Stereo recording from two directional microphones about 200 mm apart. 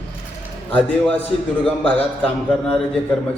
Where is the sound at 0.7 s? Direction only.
5° left (ahead or behind).